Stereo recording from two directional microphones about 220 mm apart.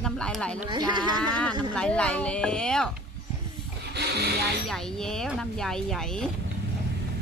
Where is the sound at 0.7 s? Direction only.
20° right (ahead or behind).